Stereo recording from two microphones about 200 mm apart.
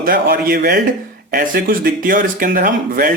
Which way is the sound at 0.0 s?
45° right (ahead or behind).